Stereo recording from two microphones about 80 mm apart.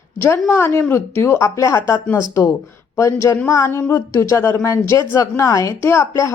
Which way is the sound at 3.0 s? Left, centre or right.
Left.